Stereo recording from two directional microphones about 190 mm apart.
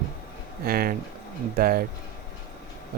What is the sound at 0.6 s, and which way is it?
Speech, 50° right (ahead or behind).